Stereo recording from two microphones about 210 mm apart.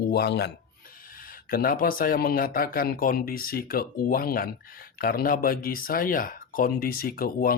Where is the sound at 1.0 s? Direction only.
40° left (ahead or behind).